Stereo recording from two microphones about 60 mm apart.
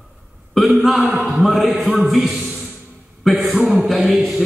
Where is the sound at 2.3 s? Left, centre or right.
Centre.